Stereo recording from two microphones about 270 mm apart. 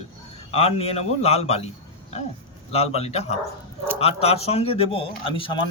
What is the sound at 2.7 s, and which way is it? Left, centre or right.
A man's voice, left.